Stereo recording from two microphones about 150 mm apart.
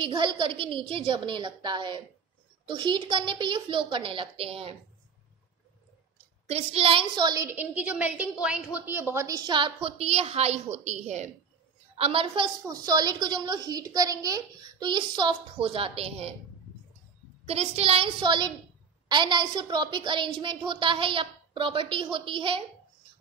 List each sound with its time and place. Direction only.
0.0 s a woman's voice: 30° right (ahead or behind)
6.5 s a woman's voice: 40° right (ahead or behind)
7.4 s a woman's voice: 10° right (ahead or behind)
9.5 s a woman's voice: 35° right (ahead or behind)
12.0 s a woman's voice: 40° right (ahead or behind)
17.5 s a woman's voice: 45° right (ahead or behind)